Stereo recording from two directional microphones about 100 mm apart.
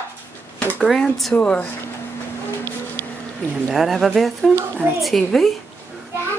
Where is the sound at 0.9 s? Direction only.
Centre (ahead or behind).